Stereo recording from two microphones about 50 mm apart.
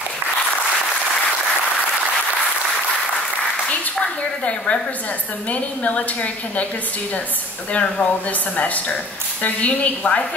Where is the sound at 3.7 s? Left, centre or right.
Left.